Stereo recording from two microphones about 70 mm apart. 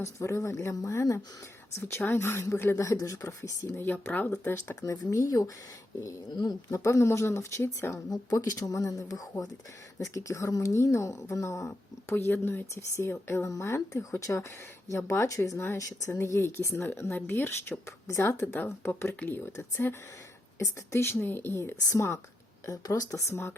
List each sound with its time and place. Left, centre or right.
0.0 s speech: left
2.0 s speech: left
3.8 s speech: left
4.3 s speech: left
6.3 s speech: left
6.7 s speech: left
8.1 s speech: left
10.0 s speech: left
12.1 s speech: left
18.1 s speech: left
18.5 s speech: left
21.5 s speech: left